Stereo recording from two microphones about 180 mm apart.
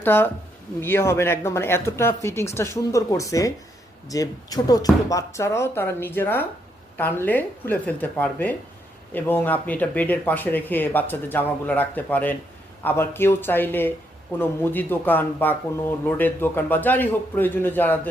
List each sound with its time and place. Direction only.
0.0 s speech: 10° left (ahead or behind)